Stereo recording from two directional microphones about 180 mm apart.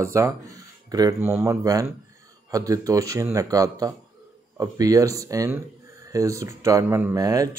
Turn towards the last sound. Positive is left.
turn(degrees=-20)  # may be behind; listen again after turning